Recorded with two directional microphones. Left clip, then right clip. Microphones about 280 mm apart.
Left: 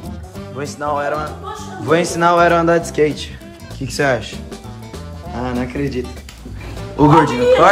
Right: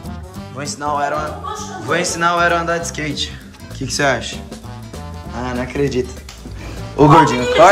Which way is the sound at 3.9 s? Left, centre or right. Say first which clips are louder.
Even; centre.